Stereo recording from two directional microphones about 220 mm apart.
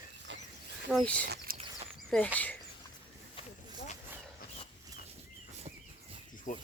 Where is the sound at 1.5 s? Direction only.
25° right (ahead or behind).